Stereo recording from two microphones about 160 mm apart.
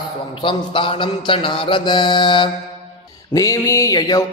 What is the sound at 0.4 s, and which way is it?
Mantra, 30° left (ahead or behind).